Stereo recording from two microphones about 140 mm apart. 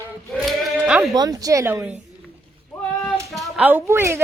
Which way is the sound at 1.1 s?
25° right (ahead or behind).